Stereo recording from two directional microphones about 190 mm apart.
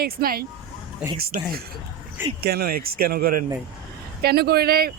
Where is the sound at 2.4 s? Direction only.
55° right (ahead or behind).